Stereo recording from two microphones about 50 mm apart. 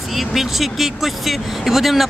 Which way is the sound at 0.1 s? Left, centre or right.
Centre.